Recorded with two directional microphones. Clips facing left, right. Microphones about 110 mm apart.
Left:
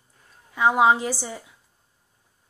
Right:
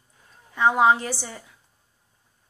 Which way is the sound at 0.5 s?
10° left (ahead or behind).